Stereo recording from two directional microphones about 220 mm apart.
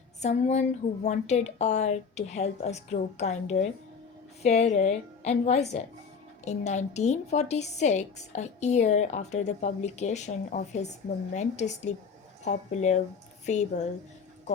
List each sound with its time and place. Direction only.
0.2 s a woman's voice: 30° left (ahead or behind)